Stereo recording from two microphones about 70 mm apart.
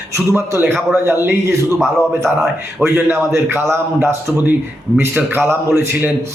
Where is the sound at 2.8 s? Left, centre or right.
Right.